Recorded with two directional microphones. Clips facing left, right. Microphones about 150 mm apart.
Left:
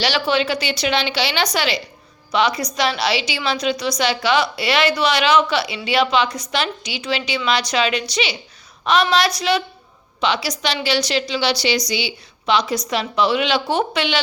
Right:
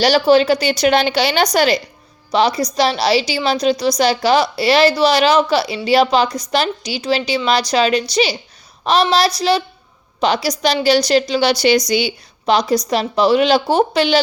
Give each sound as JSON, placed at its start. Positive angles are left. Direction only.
{"t": 0.0, "sound": "a woman's voice", "side_deg": -40}